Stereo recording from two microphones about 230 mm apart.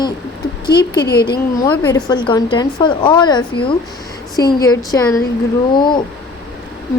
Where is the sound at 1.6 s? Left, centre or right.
Centre.